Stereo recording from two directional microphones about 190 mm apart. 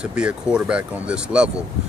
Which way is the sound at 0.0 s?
5° right (ahead or behind).